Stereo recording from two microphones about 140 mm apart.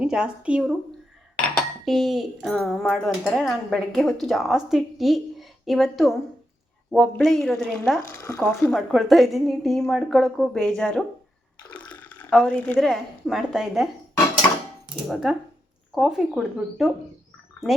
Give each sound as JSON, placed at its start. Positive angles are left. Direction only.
{"t": 0.0, "sound": "speech", "side_deg": -5}
{"t": 1.8, "sound": "speech", "side_deg": 0}
{"t": 8.0, "sound": "speech", "side_deg": 20}
{"t": 8.7, "sound": "speech", "side_deg": 0}
{"t": 11.7, "sound": "water", "side_deg": 10}
{"t": 12.3, "sound": "speech", "side_deg": 10}
{"t": 14.4, "sound": "a sound", "side_deg": 15}
{"t": 15.0, "sound": "speech", "side_deg": 0}